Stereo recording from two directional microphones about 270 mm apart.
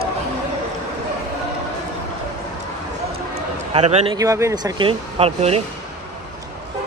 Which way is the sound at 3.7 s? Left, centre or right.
Right.